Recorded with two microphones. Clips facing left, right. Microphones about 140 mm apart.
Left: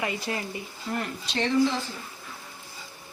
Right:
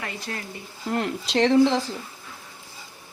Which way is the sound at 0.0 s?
10° left (ahead or behind).